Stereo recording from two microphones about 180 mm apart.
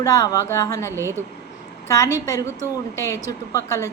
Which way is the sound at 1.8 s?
15° left (ahead or behind).